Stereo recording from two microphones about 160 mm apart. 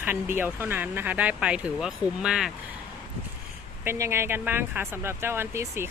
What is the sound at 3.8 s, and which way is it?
Speech, 15° right (ahead or behind).